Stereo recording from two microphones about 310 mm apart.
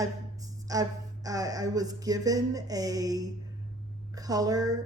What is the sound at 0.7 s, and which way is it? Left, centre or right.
A woman's voice, centre.